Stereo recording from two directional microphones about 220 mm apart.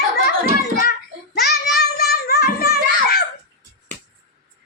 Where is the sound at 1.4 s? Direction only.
45° left (ahead or behind).